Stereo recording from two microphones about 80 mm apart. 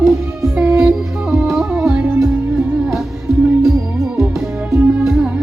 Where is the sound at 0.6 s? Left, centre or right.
Right.